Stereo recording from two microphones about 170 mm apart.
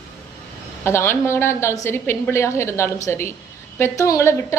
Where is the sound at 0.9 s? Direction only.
15° left (ahead or behind).